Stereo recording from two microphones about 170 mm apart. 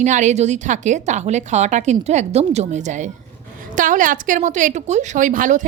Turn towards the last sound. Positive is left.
turn(degrees=-50)  # may be behind; listen again after turning